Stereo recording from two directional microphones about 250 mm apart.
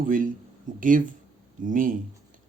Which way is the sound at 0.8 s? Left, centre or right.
Right.